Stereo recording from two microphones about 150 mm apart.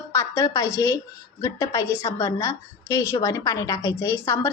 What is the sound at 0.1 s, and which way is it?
A woman's voice, 20° left (ahead or behind).